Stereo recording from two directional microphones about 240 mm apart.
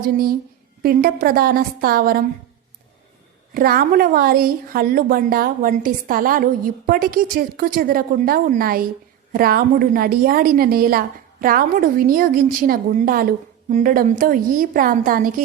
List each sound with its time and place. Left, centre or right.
0.0 s a woman's voice: right
3.5 s a woman's voice: right